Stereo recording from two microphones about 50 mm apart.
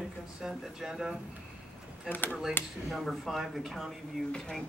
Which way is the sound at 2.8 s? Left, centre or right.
Centre.